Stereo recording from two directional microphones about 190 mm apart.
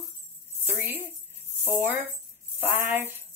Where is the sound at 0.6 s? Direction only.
10° right (ahead or behind).